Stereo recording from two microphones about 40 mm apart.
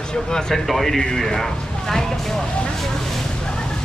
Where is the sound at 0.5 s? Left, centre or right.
Centre.